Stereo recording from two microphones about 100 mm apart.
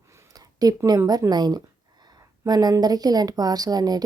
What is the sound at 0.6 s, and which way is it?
Speech, 40° right (ahead or behind).